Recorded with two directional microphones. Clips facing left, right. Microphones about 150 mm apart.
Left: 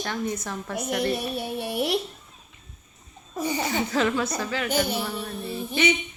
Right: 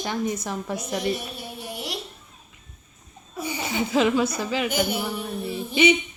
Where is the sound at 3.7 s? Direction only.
10° right (ahead or behind).